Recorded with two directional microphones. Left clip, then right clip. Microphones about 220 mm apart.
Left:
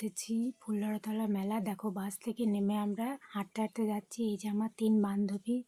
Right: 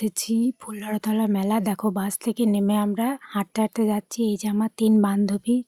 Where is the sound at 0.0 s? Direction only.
45° right (ahead or behind).